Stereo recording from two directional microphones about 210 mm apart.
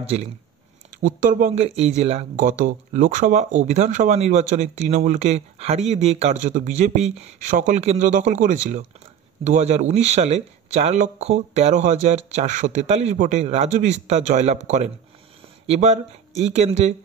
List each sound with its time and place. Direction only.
1.0 s speech: 40° right (ahead or behind)